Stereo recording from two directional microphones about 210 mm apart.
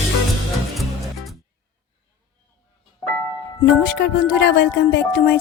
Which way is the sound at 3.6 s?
50° left (ahead or behind).